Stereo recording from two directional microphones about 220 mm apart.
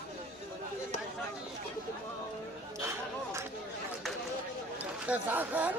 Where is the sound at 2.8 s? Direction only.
10° right (ahead or behind).